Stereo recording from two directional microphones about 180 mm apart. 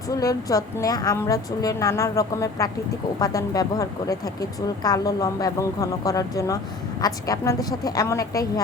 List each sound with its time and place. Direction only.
0.1 s speech: 20° left (ahead or behind)